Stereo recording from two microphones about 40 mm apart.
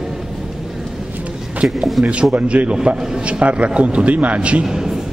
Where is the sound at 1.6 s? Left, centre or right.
Right.